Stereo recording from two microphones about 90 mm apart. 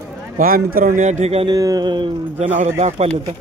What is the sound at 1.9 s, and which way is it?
Speech, 65° right (ahead or behind).